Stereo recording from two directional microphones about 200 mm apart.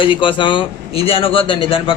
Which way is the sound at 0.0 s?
25° left (ahead or behind).